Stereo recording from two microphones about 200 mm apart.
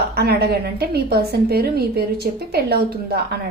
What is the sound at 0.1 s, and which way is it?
A woman's voice, 55° right (ahead or behind).